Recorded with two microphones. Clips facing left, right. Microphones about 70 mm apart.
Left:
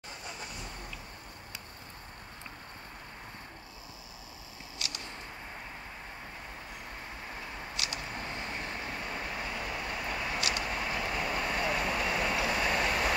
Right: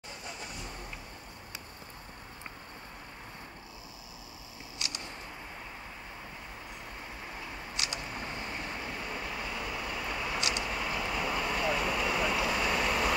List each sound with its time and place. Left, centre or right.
4.7 s a sound: right
7.7 s vehicle: right
8.4 s vehicle: centre